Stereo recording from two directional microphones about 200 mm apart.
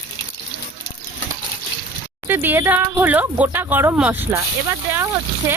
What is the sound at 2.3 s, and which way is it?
Speech, 10° right (ahead or behind).